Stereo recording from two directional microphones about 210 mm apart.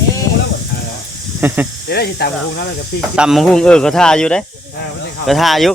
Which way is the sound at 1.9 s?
50° left (ahead or behind).